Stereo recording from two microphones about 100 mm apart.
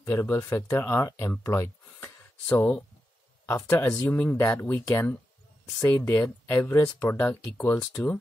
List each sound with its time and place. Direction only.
0.0 s speech: 25° left (ahead or behind)
3.4 s speech: 25° left (ahead or behind)